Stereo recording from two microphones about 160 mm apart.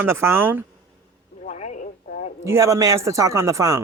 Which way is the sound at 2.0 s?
55° left (ahead or behind).